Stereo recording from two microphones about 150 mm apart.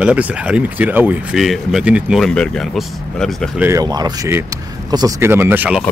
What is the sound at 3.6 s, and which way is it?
Speech, 20° right (ahead or behind).